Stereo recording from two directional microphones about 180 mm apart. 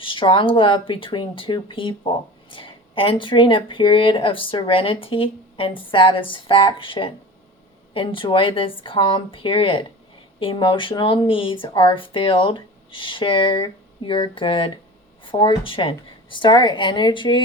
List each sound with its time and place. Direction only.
0.0 s speech: 30° left (ahead or behind)